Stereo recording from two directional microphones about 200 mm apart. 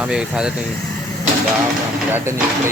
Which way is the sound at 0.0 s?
5° right (ahead or behind).